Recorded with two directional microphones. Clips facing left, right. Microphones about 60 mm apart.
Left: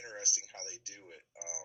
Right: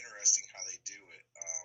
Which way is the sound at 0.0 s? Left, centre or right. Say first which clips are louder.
Left 1 dB; centre.